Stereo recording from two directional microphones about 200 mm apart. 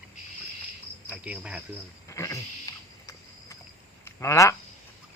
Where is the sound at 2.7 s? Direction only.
15° left (ahead or behind).